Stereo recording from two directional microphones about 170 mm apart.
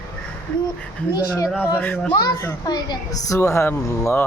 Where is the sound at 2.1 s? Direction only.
25° left (ahead or behind).